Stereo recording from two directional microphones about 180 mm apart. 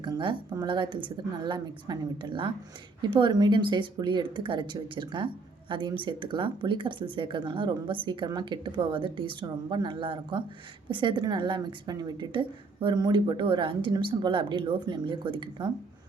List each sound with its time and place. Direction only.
0.0 s speech: 25° right (ahead or behind)